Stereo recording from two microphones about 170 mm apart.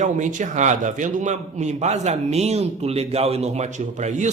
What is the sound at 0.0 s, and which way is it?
A man's voice, 45° right (ahead or behind).